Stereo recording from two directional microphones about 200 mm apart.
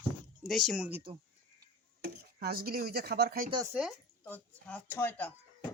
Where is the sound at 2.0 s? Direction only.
50° right (ahead or behind).